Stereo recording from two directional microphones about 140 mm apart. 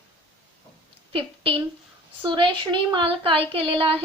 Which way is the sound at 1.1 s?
40° right (ahead or behind).